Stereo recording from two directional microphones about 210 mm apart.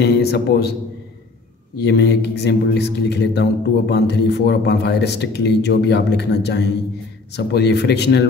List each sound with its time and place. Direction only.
0.0 s a man's voice: 50° left (ahead or behind)
1.8 s a man's voice: 55° left (ahead or behind)